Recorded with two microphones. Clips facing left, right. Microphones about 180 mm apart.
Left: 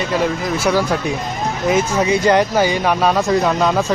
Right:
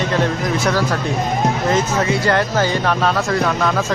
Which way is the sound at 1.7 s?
15° left (ahead or behind).